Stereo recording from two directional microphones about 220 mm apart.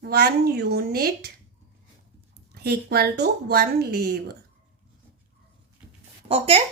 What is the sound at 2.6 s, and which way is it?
Speech, 45° right (ahead or behind).